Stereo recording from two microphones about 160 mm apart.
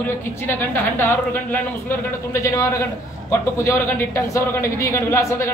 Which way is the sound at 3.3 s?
20° left (ahead or behind).